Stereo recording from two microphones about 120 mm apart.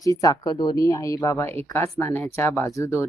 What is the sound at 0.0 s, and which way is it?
Speech, 30° left (ahead or behind).